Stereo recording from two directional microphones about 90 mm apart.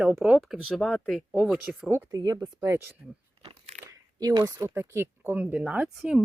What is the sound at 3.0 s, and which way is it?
Speech, 10° right (ahead or behind).